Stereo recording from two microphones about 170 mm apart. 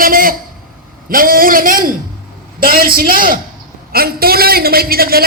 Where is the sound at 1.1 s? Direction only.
55° right (ahead or behind).